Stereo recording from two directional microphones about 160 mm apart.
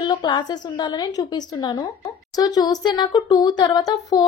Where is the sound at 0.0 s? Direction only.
30° left (ahead or behind).